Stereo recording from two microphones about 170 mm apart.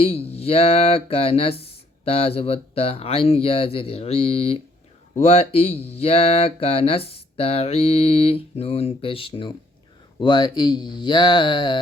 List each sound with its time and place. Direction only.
0.0 s speech: 35° left (ahead or behind)